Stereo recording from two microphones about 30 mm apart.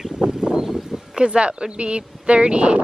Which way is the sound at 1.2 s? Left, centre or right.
Right.